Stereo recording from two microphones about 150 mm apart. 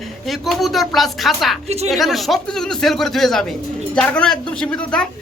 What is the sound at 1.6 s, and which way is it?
Speech, 45° right (ahead or behind).